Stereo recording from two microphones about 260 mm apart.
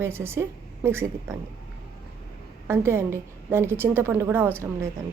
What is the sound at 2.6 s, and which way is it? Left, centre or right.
A woman's voice, centre.